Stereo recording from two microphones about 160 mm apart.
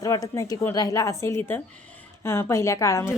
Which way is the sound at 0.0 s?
20° left (ahead or behind).